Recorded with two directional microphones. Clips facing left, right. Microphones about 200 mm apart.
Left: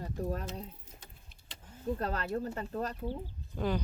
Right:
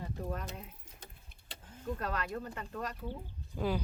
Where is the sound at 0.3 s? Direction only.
35° left (ahead or behind).